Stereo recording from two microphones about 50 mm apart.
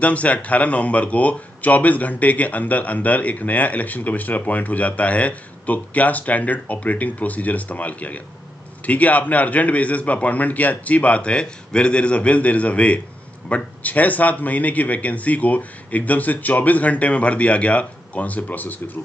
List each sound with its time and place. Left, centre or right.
0.0 s a man's voice: left